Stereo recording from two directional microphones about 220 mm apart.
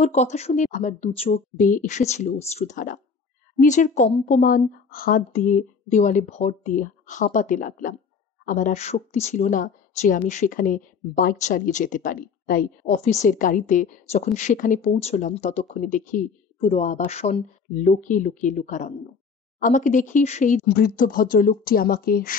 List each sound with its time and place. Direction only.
0.0 s a woman's voice: 30° left (ahead or behind)